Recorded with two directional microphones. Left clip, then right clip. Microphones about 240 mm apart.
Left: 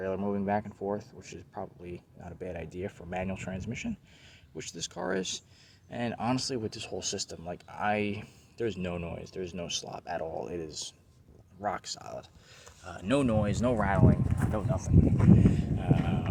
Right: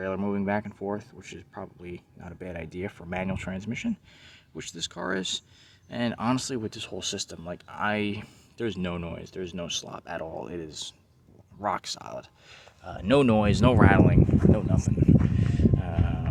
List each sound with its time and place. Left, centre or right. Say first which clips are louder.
0.0 s speech: right 2 dB; centre